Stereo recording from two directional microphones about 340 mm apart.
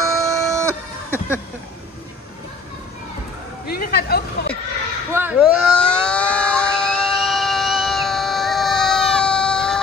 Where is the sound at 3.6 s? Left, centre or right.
Left.